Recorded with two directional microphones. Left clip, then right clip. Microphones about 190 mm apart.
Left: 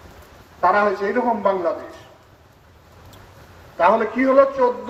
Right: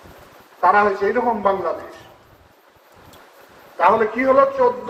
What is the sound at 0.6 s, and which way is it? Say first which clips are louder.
A man's voice: right 2 dB; 55° left (ahead or behind).